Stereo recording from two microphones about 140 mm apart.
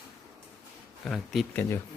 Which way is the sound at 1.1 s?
Centre (ahead or behind).